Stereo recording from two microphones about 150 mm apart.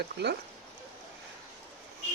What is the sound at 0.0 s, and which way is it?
Speech, 90° right.